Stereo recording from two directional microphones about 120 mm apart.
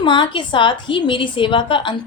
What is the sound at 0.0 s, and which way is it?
A woman's voice, 40° left (ahead or behind).